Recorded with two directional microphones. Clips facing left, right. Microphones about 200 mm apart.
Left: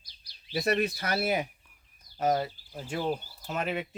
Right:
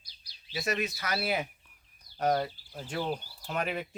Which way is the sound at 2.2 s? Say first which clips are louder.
Left 1 dB; 5° left (ahead or behind).